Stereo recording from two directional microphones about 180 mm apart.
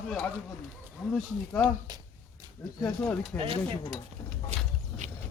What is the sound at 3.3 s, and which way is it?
Speech, 30° right (ahead or behind).